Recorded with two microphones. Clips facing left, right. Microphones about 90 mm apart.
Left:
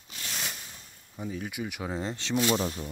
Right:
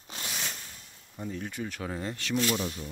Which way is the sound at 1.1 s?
5° left (ahead or behind).